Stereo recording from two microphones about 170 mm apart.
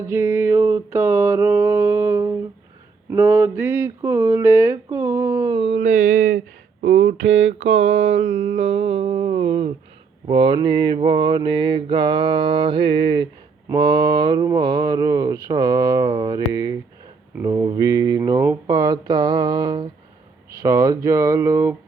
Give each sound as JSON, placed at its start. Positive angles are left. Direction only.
{"t": 0.0, "sound": "speech", "side_deg": -15}
{"t": 6.8, "sound": "a sound", "side_deg": -45}
{"t": 7.2, "sound": "mantra", "side_deg": -90}
{"t": 8.1, "sound": "music", "side_deg": -40}
{"t": 10.2, "sound": "speech", "side_deg": -30}